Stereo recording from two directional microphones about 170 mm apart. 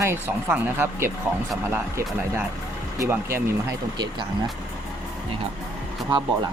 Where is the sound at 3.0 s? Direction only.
15° right (ahead or behind).